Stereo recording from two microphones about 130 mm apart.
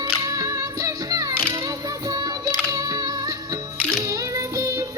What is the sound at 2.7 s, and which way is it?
Music, 30° right (ahead or behind).